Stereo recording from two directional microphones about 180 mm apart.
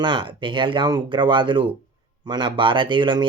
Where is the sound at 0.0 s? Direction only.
25° right (ahead or behind).